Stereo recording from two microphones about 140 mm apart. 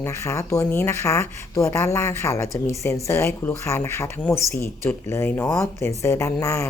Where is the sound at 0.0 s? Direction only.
20° left (ahead or behind).